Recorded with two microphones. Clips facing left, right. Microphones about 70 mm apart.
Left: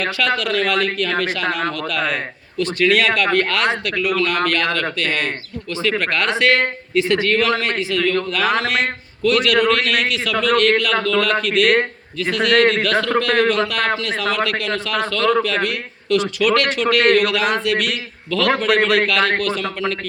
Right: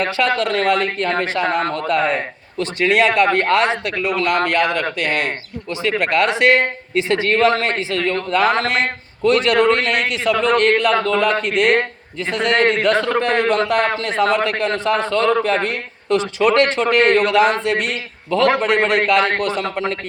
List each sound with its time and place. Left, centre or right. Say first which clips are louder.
0.0 s a man's voice: right 2 dB; right